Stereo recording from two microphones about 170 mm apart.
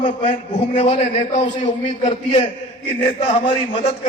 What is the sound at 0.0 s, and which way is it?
A man's voice, 30° left (ahead or behind).